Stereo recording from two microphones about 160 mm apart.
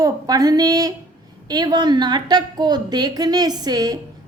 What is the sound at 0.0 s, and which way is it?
A woman's voice, 25° right (ahead or behind).